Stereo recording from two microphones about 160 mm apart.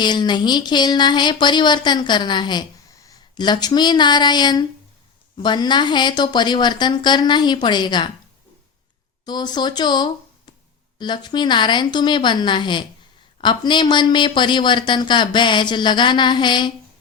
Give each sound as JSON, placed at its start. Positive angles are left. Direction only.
{"t": 0.0, "sound": "speech", "side_deg": 25}
{"t": 9.2, "sound": "speech", "side_deg": 25}